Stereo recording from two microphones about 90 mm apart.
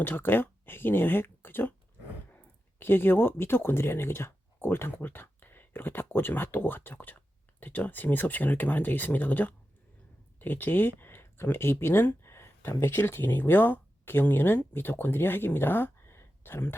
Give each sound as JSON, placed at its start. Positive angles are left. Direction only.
{"t": 0.0, "sound": "speech", "side_deg": 20}